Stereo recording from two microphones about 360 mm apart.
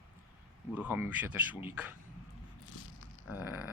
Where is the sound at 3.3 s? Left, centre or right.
Centre.